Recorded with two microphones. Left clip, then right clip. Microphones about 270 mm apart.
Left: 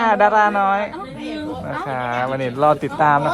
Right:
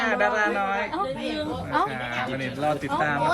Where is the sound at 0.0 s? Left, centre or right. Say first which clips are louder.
Left 8 dB; centre.